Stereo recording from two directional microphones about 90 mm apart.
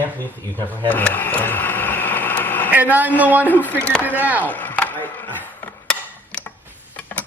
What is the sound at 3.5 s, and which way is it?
Speech, 20° left (ahead or behind).